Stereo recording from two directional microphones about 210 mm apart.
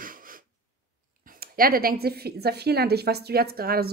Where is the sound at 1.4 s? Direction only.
45° right (ahead or behind).